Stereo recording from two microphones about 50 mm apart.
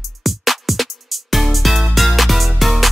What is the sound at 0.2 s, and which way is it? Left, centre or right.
Music, centre.